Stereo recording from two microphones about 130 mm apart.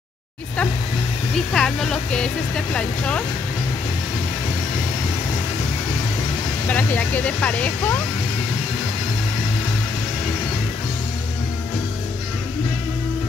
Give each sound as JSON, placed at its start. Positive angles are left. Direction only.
{"t": 1.3, "sound": "speech", "side_deg": 5}
{"t": 6.7, "sound": "speech", "side_deg": 15}